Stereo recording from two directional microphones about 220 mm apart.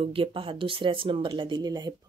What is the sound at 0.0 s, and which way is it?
Speech, 25° right (ahead or behind).